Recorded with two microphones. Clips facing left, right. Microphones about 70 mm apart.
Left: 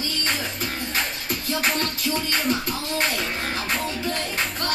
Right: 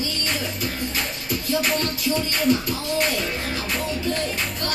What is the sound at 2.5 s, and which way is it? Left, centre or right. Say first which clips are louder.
Speech: right 6 dB; left.